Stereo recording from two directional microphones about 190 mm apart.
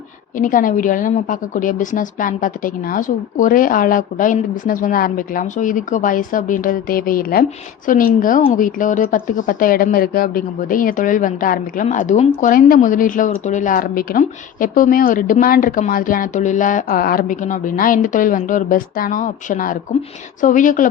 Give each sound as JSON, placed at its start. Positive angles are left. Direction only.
{"t": 0.3, "sound": "speech", "side_deg": 45}